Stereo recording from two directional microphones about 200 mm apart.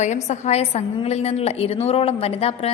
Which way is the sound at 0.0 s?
35° left (ahead or behind).